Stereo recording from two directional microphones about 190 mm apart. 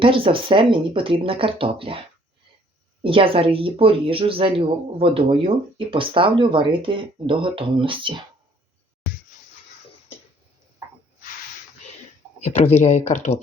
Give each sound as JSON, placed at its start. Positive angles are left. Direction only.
{"t": 0.0, "sound": "speech", "side_deg": -30}
{"t": 3.0, "sound": "speech", "side_deg": -30}
{"t": 12.4, "sound": "speech", "side_deg": 35}